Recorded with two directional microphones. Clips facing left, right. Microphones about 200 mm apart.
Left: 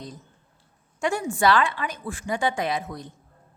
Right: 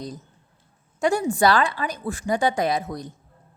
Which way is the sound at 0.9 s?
40° right (ahead or behind).